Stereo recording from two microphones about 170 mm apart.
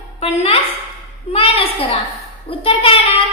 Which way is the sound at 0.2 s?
35° left (ahead or behind).